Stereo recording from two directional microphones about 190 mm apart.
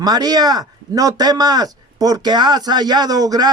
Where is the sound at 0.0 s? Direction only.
20° right (ahead or behind).